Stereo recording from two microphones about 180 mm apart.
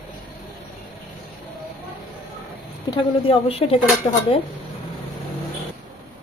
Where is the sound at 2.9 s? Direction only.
30° left (ahead or behind).